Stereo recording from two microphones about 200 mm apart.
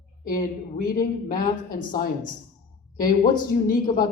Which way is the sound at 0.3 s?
45° left (ahead or behind).